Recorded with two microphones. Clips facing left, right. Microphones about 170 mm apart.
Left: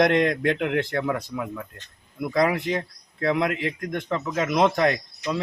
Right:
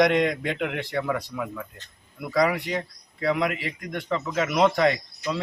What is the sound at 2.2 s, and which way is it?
Speech, 20° left (ahead or behind).